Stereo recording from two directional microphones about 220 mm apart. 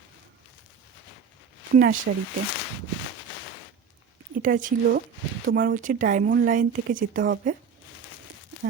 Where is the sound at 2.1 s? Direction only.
40° right (ahead or behind).